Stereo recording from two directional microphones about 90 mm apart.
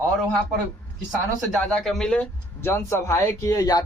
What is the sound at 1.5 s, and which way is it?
Speech, centre (ahead or behind).